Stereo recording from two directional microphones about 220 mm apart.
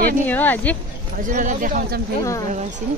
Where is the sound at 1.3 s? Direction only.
35° right (ahead or behind).